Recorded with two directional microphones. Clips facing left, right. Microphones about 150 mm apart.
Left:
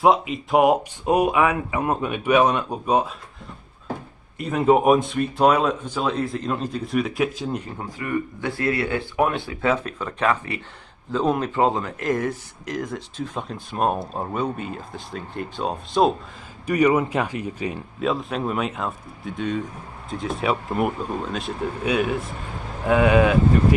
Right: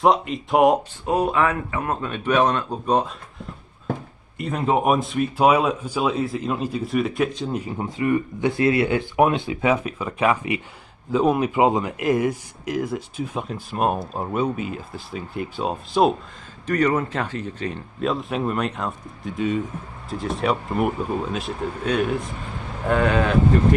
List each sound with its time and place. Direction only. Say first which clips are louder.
0.0 s speech: even; centre (ahead or behind)
1.0 s speech: left 2 dB; 15° left (ahead or behind)
4.4 s speech: left 4 dB; centre (ahead or behind)
7.8 s speech: right 9 dB; 20° right (ahead or behind); by 16.1 s 5° right (ahead or behind)
16.6 s speech: left 2 dB; 10° left (ahead or behind)